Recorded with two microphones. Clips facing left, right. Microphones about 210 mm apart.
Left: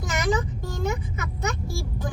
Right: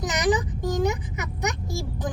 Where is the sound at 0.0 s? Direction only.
20° right (ahead or behind).